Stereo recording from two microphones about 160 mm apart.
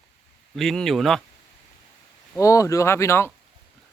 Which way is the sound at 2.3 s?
20° left (ahead or behind).